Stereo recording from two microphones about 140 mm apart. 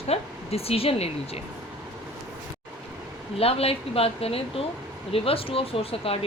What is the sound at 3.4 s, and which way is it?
A woman's voice, 45° left (ahead or behind).